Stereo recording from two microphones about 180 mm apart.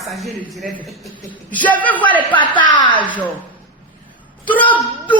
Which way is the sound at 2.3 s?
25° left (ahead or behind).